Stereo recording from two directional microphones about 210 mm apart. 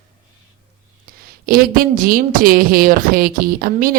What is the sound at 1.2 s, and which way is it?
A woman's voice, 45° right (ahead or behind).